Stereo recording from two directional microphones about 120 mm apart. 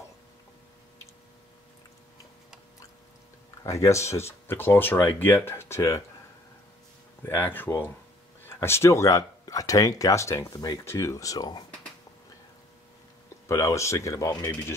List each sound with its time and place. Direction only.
3.6 s speech: 25° left (ahead or behind)
7.2 s speech: 15° left (ahead or behind); by 11.6 s 30° left (ahead or behind)
13.5 s speech: 25° left (ahead or behind)